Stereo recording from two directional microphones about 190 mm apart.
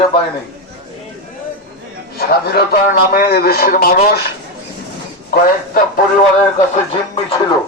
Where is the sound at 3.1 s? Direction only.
50° left (ahead or behind).